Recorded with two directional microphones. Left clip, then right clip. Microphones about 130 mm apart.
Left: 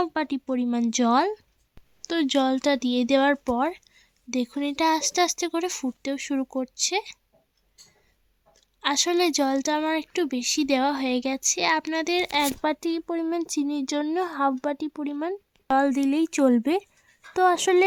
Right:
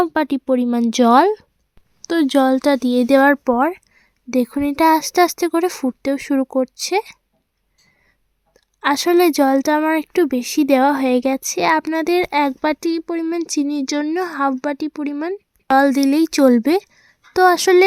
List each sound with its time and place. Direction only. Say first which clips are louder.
0.0 s speech: right 8 dB; 35° right (ahead or behind)
8.8 s speech: right 8 dB; 35° right (ahead or behind)